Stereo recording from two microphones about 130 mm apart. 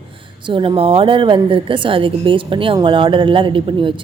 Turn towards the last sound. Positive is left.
turn(degrees=-40)  # may be behind; listen again after turning